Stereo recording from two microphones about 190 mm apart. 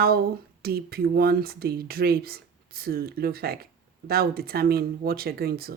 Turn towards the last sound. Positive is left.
turn(degrees=-55)  # may be behind; listen again after turning